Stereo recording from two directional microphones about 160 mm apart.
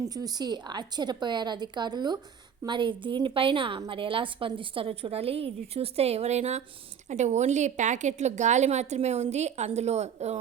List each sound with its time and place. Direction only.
0.0 s a woman's voice: 25° right (ahead or behind); by 10.3 s 45° right (ahead or behind)